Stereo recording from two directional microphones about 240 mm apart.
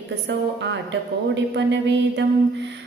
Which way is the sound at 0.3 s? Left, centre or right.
Right.